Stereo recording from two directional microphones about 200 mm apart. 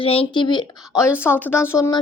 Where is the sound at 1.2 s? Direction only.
10° left (ahead or behind).